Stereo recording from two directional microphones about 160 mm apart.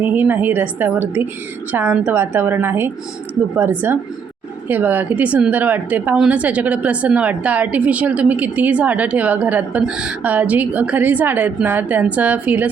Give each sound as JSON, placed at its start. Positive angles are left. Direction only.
{"t": 0.0, "sound": "a woman's voice", "side_deg": -10}